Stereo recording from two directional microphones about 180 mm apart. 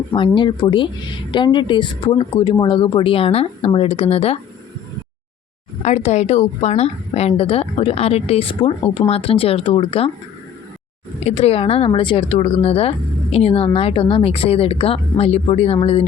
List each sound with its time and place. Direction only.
0.1 s speech: 25° left (ahead or behind)
5.8 s a woman's voice: 40° left (ahead or behind)
11.3 s a woman's voice: 35° left (ahead or behind)